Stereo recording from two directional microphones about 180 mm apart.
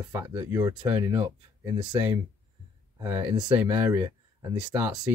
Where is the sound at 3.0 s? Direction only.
10° right (ahead or behind).